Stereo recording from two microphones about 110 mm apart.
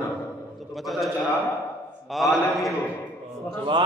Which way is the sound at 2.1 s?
Centre (ahead or behind).